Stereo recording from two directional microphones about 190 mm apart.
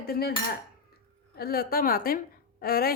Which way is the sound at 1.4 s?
55° left (ahead or behind).